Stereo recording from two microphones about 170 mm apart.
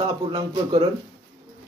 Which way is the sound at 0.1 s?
25° right (ahead or behind).